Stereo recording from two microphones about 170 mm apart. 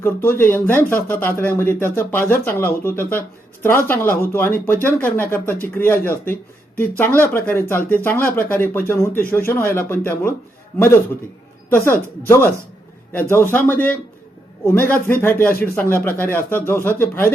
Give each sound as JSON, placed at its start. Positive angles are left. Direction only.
{"t": 0.0, "sound": "speech", "side_deg": 15}